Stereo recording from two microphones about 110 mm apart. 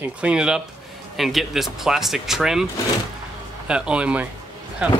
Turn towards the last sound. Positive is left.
turn(degrees=-10)  # may be behind; listen again after turning